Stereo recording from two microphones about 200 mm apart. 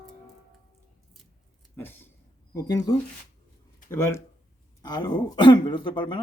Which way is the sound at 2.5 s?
15° left (ahead or behind).